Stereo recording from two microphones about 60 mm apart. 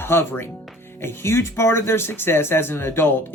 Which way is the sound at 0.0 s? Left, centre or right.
Left.